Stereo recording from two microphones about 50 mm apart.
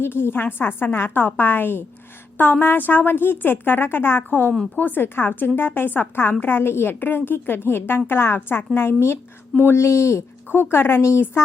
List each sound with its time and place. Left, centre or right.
0.0 s a woman's voice: left
9.7 s speech: left
10.5 s a woman's voice: left